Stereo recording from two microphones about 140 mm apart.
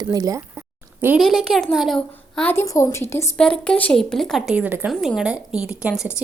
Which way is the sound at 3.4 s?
5° left (ahead or behind).